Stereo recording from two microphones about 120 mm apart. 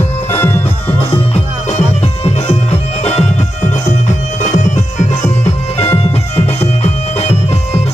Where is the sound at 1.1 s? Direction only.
65° left (ahead or behind).